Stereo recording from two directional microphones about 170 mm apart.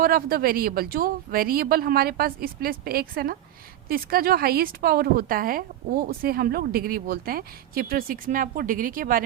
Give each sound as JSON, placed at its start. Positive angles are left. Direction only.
{"t": 0.0, "sound": "a woman's voice", "side_deg": -60}